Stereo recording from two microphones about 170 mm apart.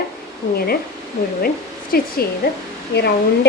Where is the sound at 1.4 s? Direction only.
60° left (ahead or behind).